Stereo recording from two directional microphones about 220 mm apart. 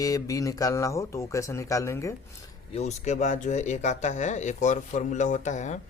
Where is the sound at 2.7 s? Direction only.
30° left (ahead or behind).